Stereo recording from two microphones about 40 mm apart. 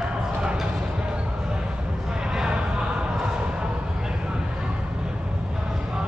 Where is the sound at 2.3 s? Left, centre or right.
Centre.